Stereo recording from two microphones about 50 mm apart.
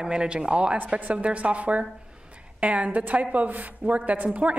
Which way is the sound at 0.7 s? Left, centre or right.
Right.